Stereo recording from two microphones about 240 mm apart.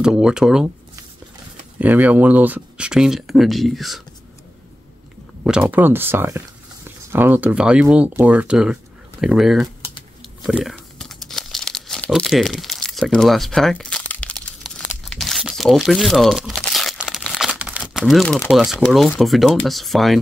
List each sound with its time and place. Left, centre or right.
0.0 s speech: centre
1.8 s speech: centre
5.4 s speech: centre
9.8 s typing: left
10.4 s tearing: centre
15.0 s crunch: centre
19.6 s speech: centre